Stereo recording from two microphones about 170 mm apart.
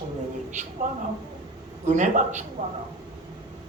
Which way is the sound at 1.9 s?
45° right (ahead or behind).